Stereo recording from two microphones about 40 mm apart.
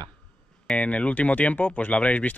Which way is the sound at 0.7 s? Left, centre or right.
Left.